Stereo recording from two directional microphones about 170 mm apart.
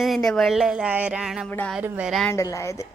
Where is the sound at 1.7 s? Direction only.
5° right (ahead or behind).